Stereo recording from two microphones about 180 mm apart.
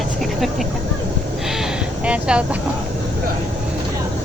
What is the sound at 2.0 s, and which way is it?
Speech, 5° right (ahead or behind).